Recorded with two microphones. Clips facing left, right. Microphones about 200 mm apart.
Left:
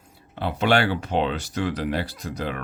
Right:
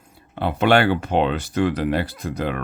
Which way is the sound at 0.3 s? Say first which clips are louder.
Right 4 dB; 55° right (ahead or behind).